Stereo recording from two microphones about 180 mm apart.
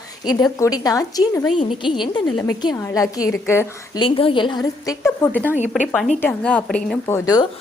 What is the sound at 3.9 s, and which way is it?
A woman's voice, 30° left (ahead or behind).